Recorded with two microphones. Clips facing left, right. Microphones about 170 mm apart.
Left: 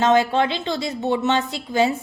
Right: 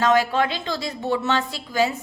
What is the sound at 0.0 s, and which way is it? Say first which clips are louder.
A woman's voice: left 2 dB; 25° left (ahead or behind).